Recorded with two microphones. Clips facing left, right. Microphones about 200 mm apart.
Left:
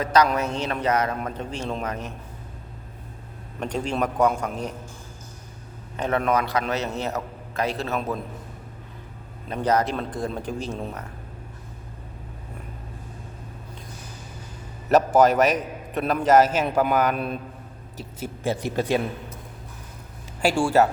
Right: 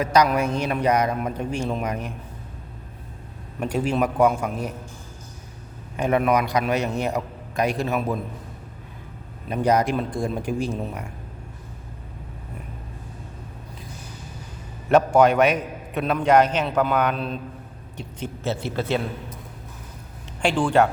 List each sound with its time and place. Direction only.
0.0 s a man's voice: 10° right (ahead or behind)
3.6 s a man's voice: 5° right (ahead or behind)
6.0 s a man's voice: 10° right (ahead or behind)
9.5 s a man's voice: 10° right (ahead or behind)
14.8 s a man's voice: centre (ahead or behind)
20.4 s a man's voice: 10° left (ahead or behind)